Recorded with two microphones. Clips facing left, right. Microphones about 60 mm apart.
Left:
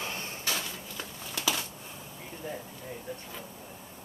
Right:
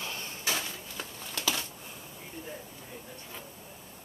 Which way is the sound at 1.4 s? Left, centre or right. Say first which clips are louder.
Left 1 dB; centre.